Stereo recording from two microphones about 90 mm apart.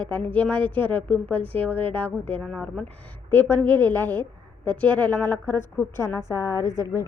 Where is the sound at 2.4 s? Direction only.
5° left (ahead or behind).